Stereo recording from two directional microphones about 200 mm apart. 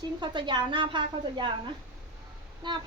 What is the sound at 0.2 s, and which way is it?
A woman's voice, 20° right (ahead or behind).